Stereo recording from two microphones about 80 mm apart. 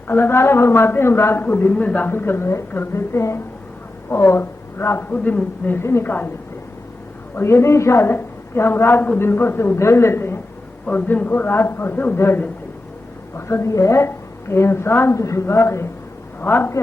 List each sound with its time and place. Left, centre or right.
0.1 s a man's voice: left
5.1 s a man's voice: centre
7.3 s a man's voice: left
10.8 s a man's voice: centre